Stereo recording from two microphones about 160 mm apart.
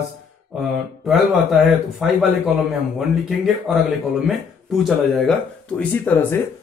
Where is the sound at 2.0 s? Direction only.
Centre (ahead or behind).